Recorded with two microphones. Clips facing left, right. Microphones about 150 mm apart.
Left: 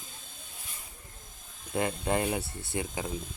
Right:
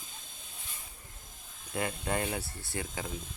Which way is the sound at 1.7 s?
25° left (ahead or behind).